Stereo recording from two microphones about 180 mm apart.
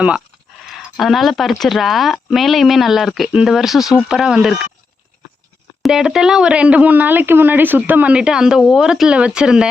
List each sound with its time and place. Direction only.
0.6 s speech: centre (ahead or behind)
5.8 s speech: centre (ahead or behind)